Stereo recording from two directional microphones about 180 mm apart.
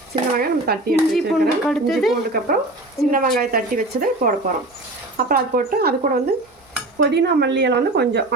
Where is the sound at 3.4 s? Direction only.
55° right (ahead or behind).